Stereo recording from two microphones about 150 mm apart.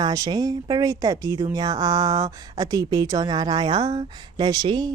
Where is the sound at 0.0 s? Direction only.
25° right (ahead or behind).